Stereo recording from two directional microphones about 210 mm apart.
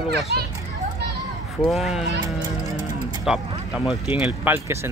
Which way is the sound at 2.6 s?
20° right (ahead or behind).